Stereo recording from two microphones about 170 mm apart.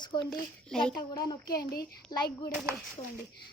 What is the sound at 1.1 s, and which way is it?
Speech, 25° left (ahead or behind).